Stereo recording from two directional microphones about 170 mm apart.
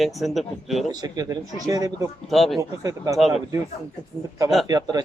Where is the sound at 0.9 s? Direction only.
20° right (ahead or behind).